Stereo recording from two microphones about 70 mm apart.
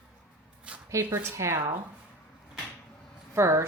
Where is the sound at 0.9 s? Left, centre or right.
Right.